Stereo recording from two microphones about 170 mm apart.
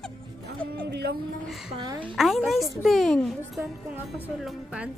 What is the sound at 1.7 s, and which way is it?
Speech, 25° right (ahead or behind).